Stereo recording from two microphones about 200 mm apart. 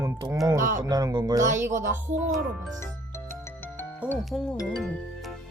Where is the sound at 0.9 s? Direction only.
20° right (ahead or behind).